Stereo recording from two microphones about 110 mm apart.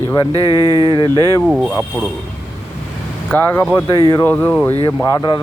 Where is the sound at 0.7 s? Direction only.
40° left (ahead or behind).